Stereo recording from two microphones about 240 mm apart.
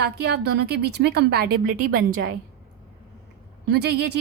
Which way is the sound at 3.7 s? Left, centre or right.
Right.